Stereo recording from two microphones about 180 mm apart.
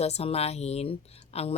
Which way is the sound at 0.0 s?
35° left (ahead or behind).